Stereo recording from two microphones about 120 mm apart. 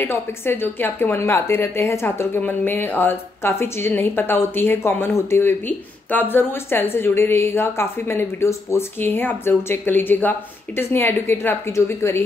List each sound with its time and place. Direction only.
0.0 s a woman's voice: 20° left (ahead or behind)